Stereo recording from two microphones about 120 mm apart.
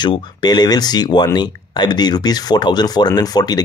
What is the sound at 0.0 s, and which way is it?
Speech, 40° left (ahead or behind).